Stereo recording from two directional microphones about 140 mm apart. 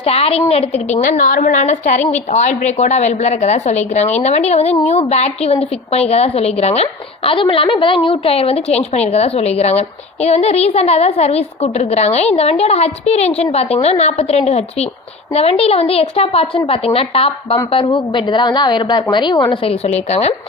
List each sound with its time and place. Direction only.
0.0 s a woman's voice: 45° left (ahead or behind)
1.2 s a woman's voice: 75° left (ahead or behind); by 19.5 s 30° left (ahead or behind)
19.6 s a woman's voice: 50° left (ahead or behind)